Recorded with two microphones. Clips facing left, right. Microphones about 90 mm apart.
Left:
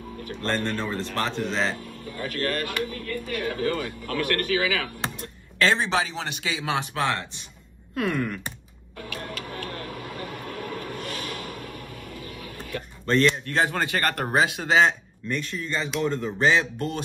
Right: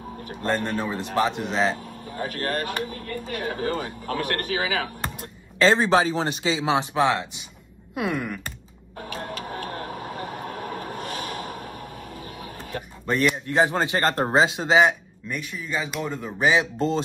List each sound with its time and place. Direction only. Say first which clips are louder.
0.4 s speech: right 2 dB; 15° right (ahead or behind)
2.0 s speech: even; 45° right (ahead or behind); by 8.4 s 15° right (ahead or behind)
8.9 s printer: right 2 dB; 40° right (ahead or behind)
13.0 s speech: left 2 dB; 10° right (ahead or behind)
16.7 s speech: right 6 dB; 25° right (ahead or behind)